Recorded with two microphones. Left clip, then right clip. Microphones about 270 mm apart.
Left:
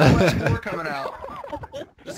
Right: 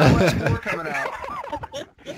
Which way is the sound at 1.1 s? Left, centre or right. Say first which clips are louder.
Right 4 dB; right.